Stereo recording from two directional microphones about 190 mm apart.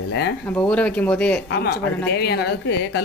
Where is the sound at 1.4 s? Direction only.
60° left (ahead or behind).